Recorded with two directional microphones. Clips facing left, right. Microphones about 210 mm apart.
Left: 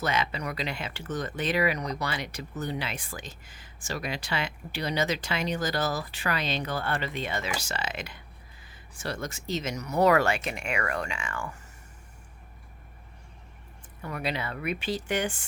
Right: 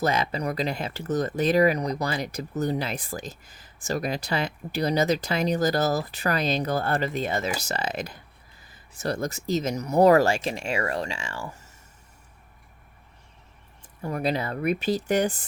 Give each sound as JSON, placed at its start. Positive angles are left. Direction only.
{"t": 0.0, "sound": "speech", "side_deg": -35}
{"t": 14.0, "sound": "speech", "side_deg": -35}